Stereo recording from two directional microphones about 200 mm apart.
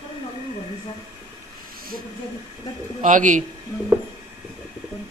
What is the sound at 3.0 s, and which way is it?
Speech, 40° right (ahead or behind).